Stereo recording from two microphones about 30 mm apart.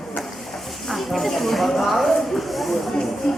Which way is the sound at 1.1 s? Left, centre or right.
Centre.